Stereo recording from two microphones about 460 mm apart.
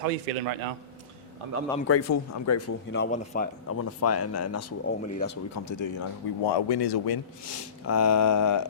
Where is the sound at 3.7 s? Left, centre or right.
Left.